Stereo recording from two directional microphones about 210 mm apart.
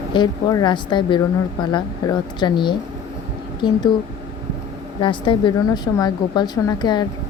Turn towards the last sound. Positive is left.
turn(degrees=20)  # may be behind; listen again after turning